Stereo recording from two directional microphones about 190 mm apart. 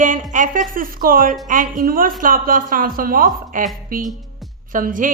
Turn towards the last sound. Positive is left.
turn(degrees=-45)  # may be behind; listen again after turning